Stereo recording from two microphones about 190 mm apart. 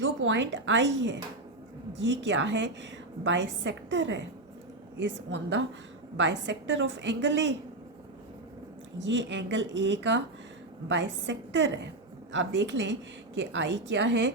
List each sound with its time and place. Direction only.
0.0 s a woman's voice: 75° right (ahead or behind)
2.2 s a woman's voice: 70° right (ahead or behind)
5.3 s a woman's voice: 70° right (ahead or behind)
9.0 s a woman's voice: 70° right (ahead or behind)